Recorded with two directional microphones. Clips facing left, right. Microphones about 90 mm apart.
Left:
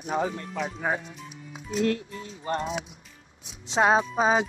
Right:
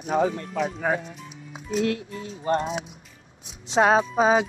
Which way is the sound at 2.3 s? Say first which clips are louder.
Right 4 dB; 35° right (ahead or behind).